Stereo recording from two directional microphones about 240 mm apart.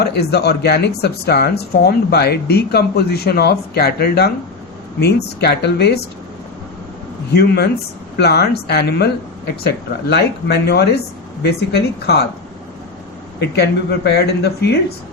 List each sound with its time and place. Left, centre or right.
0.0 s speech: left
7.3 s speech: left
13.4 s speech: left